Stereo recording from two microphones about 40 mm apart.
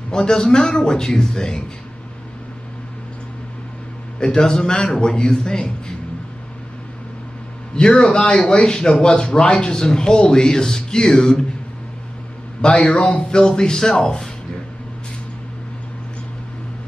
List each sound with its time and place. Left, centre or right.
0.1 s a man's voice: centre
4.4 s a man's voice: centre
8.0 s a man's voice: left
8.5 s a man's voice: centre
12.7 s a man's voice: left